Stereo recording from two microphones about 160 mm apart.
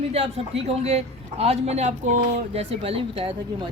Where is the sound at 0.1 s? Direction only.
40° right (ahead or behind).